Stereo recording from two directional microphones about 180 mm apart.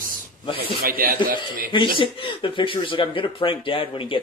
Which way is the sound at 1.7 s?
30° left (ahead or behind).